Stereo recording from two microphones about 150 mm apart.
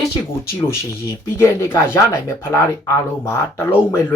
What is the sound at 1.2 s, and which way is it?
Speech, 15° left (ahead or behind).